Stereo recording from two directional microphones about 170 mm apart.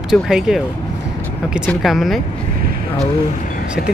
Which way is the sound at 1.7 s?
Centre (ahead or behind).